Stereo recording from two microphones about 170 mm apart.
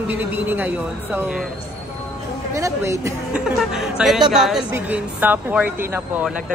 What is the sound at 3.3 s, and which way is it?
Speech, 5° right (ahead or behind).